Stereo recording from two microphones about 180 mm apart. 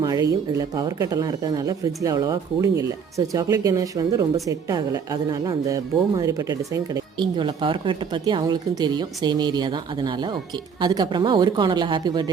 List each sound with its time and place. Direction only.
0.0 s speech: 20° right (ahead or behind)